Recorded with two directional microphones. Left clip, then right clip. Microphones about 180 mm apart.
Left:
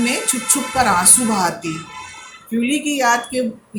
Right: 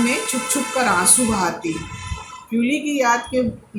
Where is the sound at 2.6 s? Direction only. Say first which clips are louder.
Left 1 dB; 40° left (ahead or behind).